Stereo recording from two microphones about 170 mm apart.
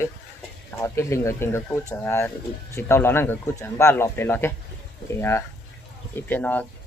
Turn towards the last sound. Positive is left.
turn(degrees=10)  # may be behind; listen again after turning